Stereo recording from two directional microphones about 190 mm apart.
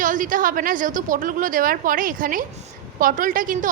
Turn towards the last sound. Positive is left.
turn(degrees=-45)  # may be behind; listen again after turning